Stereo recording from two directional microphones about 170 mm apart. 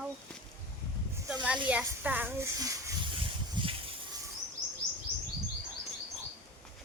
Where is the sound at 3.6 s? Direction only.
25° right (ahead or behind).